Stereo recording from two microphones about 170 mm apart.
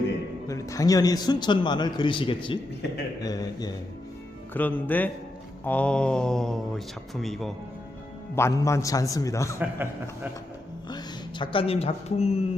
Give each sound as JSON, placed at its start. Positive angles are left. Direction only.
{"t": 0.4, "sound": "a man's voice", "side_deg": 20}
{"t": 4.5, "sound": "speech", "side_deg": 10}
{"t": 8.4, "sound": "a man's voice", "side_deg": 15}
{"t": 9.6, "sound": "a man's voice", "side_deg": -10}
{"t": 10.8, "sound": "speech", "side_deg": 25}